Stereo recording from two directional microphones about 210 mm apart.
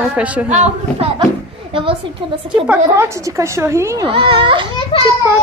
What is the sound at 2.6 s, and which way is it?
A woman's voice, 10° right (ahead or behind).